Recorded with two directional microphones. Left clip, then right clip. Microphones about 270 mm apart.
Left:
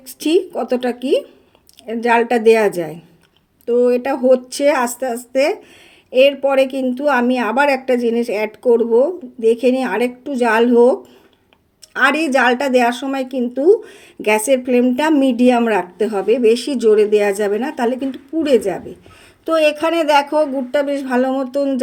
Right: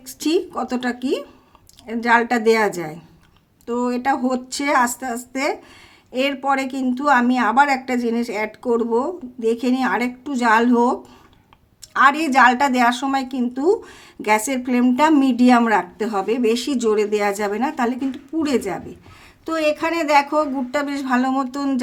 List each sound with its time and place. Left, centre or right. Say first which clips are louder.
0.2 s a woman's voice: left 4 dB; centre
6.6 s speech: left 10 dB; right
6.8 s a woman's voice: left 1 dB; centre
11.9 s a woman's voice: even; centre
20.1 s speech: left 2 dB; centre